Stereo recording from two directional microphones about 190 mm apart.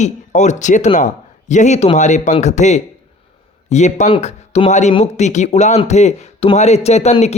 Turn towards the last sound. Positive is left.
turn(degrees=35)  # may be behind; listen again after turning